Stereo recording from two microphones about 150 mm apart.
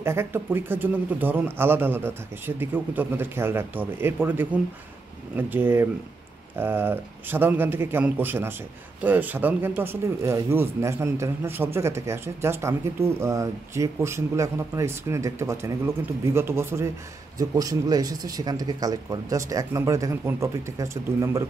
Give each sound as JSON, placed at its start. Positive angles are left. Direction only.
{"t": 0.0, "sound": "speech", "side_deg": -15}